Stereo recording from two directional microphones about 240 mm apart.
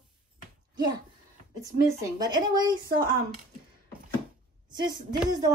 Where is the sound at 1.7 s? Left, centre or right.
Centre.